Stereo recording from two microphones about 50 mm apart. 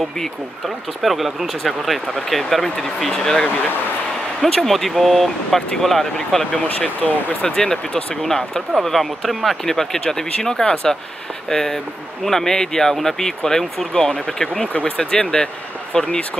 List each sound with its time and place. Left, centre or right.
1.0 s speech: centre
6.3 s speech: centre
7.0 s speech: left
7.4 s speech: centre
14.7 s speech: left
15.0 s speech: centre